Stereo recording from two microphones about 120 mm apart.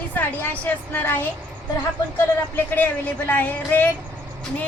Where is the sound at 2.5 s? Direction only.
15° left (ahead or behind).